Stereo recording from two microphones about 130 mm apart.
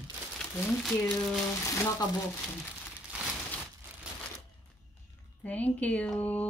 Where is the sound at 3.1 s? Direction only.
10° right (ahead or behind).